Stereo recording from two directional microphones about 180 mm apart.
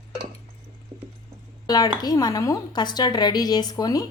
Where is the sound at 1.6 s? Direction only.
20° left (ahead or behind).